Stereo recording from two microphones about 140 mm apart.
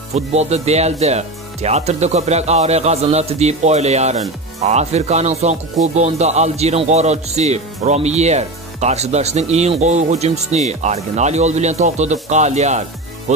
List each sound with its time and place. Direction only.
0.1 s speech: 50° right (ahead or behind)